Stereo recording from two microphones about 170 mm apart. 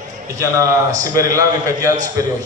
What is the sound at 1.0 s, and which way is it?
Speech, 20° right (ahead or behind).